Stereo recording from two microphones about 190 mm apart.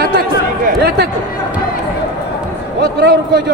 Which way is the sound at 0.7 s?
60° right (ahead or behind).